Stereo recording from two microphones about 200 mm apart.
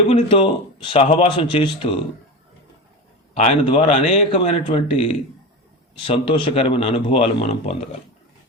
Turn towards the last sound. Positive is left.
turn(degrees=30)  # may be behind; listen again after turning